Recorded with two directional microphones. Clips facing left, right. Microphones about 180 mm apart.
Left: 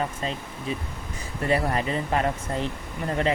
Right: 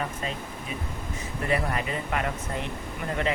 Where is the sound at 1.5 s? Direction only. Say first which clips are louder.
Left 4 dB; 30° left (ahead or behind).